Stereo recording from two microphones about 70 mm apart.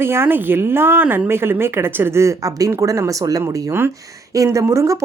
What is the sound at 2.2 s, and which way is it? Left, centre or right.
Speech, right.